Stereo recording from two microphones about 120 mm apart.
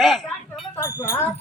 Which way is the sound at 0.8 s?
25° left (ahead or behind).